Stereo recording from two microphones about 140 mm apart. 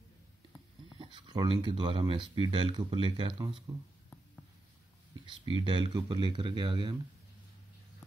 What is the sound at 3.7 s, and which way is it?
Speech, 20° right (ahead or behind).